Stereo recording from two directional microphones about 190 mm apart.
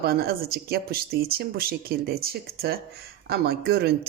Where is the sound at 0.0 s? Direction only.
55° right (ahead or behind).